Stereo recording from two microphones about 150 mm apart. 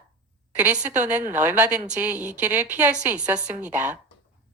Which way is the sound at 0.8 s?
55° right (ahead or behind).